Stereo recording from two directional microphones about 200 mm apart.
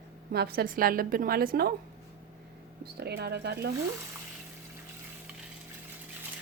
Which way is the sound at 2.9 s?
55° right (ahead or behind).